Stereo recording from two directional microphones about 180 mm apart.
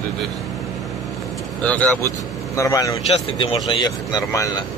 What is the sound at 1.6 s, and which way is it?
Speech, 10° left (ahead or behind).